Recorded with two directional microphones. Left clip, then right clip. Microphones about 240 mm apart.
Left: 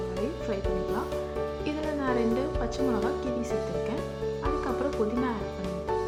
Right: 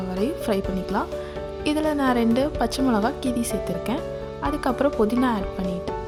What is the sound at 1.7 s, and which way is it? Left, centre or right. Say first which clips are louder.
A woman's voice: right 10 dB; right.